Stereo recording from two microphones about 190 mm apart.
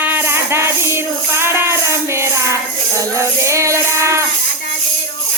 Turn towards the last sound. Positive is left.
turn(degrees=-15)  # may be behind; listen again after turning